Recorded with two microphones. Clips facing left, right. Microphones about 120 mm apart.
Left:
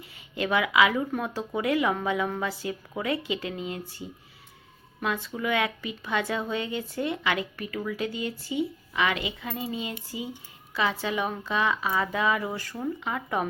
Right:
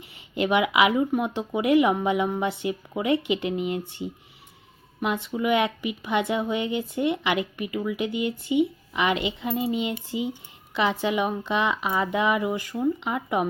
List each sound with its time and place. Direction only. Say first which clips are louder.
0.3 s a woman's voice: right 2 dB; 20° right (ahead or behind)